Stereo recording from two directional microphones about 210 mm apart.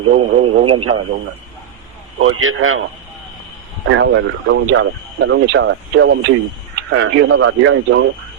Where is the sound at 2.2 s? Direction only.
75° right (ahead or behind).